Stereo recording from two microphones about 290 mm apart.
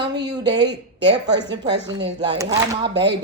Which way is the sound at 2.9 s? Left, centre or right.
Right.